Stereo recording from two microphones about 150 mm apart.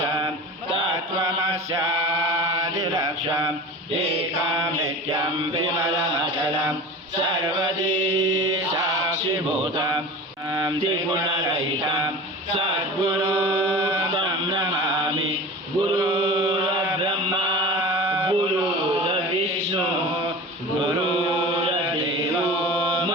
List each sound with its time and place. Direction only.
2.5 s mantra: 30° right (ahead or behind)
8.3 s mantra: 25° right (ahead or behind)
13.8 s a sound: 30° right (ahead or behind)
16.0 s chant: 30° right (ahead or behind)
17.0 s mantra: 30° right (ahead or behind)